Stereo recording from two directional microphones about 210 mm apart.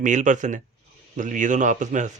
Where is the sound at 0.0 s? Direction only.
35° right (ahead or behind).